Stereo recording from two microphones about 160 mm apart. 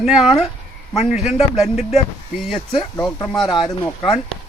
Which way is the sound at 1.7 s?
45° left (ahead or behind).